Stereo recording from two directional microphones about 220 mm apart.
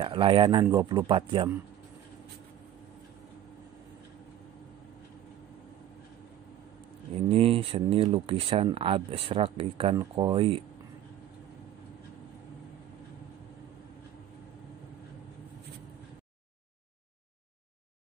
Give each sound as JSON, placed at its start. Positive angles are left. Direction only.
{"t": 0.0, "sound": "speech", "side_deg": -25}
{"t": 7.2, "sound": "speech", "side_deg": -25}